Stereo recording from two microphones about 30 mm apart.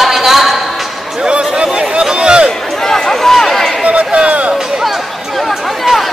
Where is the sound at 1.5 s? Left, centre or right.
Right.